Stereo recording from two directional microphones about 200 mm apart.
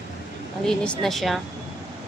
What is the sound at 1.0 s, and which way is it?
Speech, centre (ahead or behind).